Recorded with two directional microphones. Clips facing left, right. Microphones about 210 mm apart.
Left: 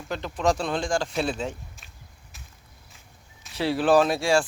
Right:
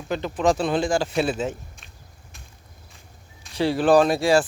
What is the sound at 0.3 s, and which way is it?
Speech, 5° right (ahead or behind).